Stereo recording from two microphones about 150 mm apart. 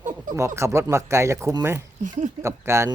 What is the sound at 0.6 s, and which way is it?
Speech, 20° right (ahead or behind).